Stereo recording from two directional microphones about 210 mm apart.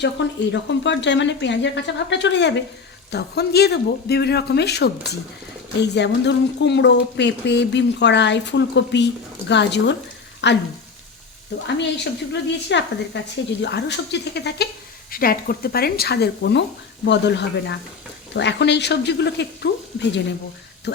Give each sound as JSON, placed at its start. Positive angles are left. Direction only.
{"t": 0.2, "sound": "speech", "side_deg": 55}